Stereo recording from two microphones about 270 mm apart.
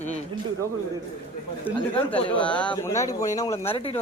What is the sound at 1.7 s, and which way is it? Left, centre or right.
Speech, centre.